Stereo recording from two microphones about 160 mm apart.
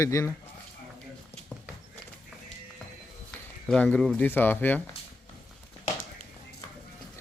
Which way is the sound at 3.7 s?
5° left (ahead or behind).